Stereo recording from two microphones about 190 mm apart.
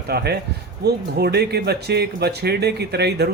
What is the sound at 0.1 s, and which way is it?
Speech, 55° right (ahead or behind).